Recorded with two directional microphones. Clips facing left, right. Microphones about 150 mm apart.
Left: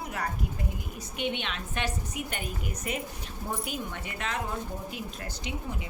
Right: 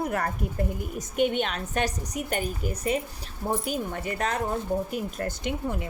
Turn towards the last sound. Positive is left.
turn(degrees=-50)  # may be behind; listen again after turning